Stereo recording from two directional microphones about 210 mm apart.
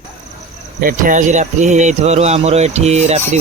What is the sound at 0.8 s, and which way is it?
Speech, 40° right (ahead or behind).